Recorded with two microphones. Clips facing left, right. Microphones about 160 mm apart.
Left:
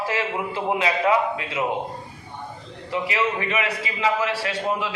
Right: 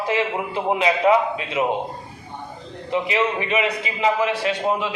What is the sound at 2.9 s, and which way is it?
A man's voice, 20° right (ahead or behind).